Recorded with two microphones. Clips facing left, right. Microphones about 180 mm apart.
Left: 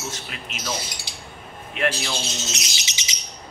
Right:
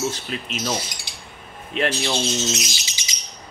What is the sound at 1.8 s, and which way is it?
Speech, 30° right (ahead or behind).